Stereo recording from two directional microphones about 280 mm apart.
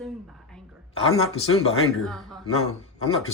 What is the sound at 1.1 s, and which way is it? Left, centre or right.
Speech, left.